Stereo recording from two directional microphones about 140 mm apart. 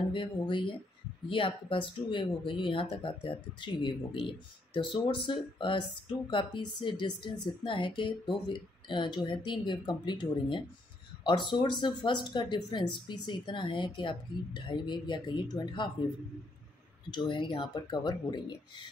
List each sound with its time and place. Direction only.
0.1 s speech: 35° left (ahead or behind)
17.3 s speech: 35° left (ahead or behind)